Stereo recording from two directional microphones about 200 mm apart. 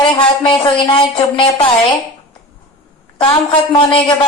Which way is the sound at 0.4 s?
25° left (ahead or behind).